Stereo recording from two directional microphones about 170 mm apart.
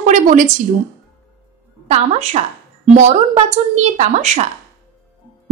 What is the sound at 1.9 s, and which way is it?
A woman's voice, 40° right (ahead or behind).